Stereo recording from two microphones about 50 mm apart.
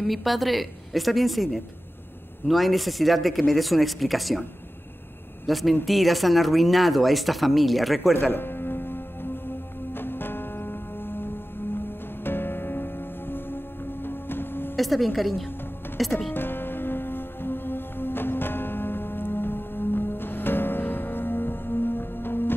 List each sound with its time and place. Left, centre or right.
0.0 s speech: centre
5.5 s speech: centre
8.1 s music: left
14.8 s a woman's voice: centre
16.3 s music: left